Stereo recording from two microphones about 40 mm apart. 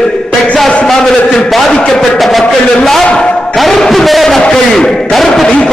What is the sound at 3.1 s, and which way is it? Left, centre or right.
Speech, left.